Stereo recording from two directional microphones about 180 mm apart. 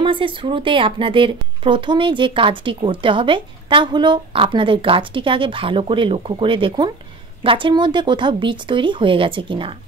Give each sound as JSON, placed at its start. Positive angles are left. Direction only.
{"t": 0.0, "sound": "speech", "side_deg": -30}